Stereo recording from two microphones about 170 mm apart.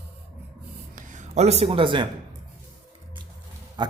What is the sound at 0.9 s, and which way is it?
Speech, 50° right (ahead or behind).